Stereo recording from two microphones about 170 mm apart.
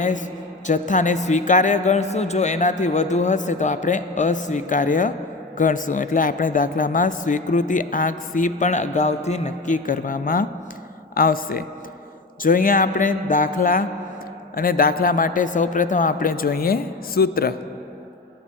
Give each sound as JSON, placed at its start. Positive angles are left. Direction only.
{"t": 0.0, "sound": "a man's voice", "side_deg": 45}